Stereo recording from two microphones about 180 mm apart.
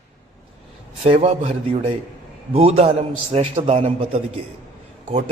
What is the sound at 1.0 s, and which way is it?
A man's voice, 35° right (ahead or behind).